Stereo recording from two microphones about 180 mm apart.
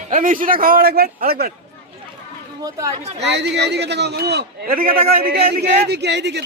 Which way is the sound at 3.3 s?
70° right (ahead or behind).